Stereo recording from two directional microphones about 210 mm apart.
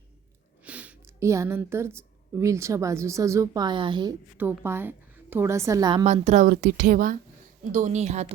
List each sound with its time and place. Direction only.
0.6 s a woman's voice: 5° right (ahead or behind); by 4.1 s 20° right (ahead or behind)
4.4 s a woman's voice: 10° right (ahead or behind)
6.1 s speech: 35° right (ahead or behind)